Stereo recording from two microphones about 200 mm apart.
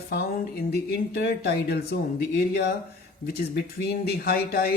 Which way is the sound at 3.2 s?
50° left (ahead or behind).